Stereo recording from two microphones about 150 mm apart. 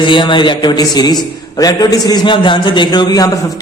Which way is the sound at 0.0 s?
35° left (ahead or behind).